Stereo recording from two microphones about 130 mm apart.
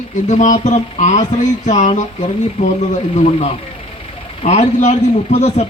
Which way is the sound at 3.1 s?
50° left (ahead or behind).